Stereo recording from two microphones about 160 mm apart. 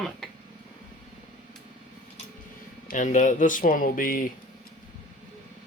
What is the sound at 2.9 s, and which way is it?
Speech, 50° left (ahead or behind).